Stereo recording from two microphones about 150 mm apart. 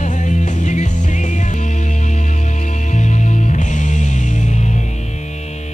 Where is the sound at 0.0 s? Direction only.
55° left (ahead or behind).